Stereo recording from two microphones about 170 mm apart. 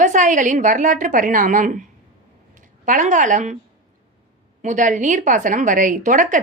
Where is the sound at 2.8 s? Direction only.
45° right (ahead or behind).